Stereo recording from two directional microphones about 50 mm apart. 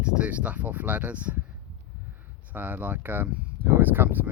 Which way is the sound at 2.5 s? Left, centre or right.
Right.